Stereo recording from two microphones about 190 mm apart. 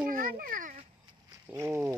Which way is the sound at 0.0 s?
45° right (ahead or behind).